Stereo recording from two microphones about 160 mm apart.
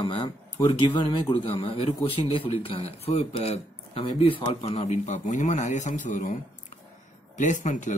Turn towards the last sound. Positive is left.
turn(degrees=50)  # may be behind; listen again after turning